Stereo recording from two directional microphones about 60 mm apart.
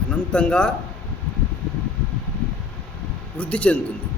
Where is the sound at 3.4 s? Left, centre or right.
Left.